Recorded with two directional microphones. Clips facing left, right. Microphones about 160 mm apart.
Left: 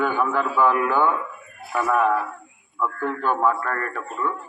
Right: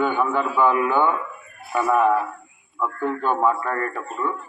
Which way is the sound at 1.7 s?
15° right (ahead or behind).